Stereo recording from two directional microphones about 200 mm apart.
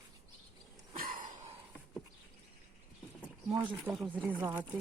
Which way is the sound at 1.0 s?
40° right (ahead or behind).